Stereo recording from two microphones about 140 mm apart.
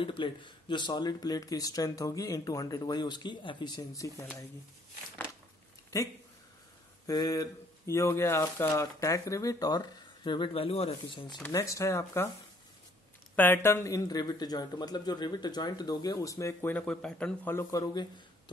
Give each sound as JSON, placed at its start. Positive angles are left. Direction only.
{"t": 0.0, "sound": "speech", "side_deg": 40}
{"t": 5.9, "sound": "speech", "side_deg": 25}
{"t": 11.5, "sound": "speech", "side_deg": 20}
{"t": 13.4, "sound": "speech", "side_deg": 15}
{"t": 17.6, "sound": "speech", "side_deg": 25}